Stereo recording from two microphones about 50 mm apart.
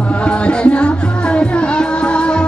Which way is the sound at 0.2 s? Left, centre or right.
Left.